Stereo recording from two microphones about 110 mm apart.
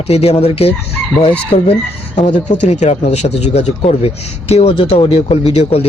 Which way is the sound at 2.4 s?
90° left.